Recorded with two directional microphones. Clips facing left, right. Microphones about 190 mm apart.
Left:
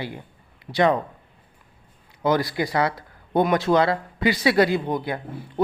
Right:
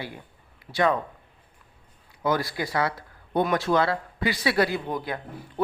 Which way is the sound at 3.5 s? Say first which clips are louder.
Left 4 dB; 20° left (ahead or behind).